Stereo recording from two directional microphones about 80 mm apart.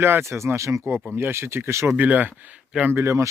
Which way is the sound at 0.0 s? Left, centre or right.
Right.